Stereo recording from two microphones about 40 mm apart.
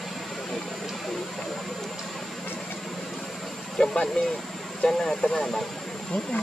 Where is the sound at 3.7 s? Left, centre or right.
Centre.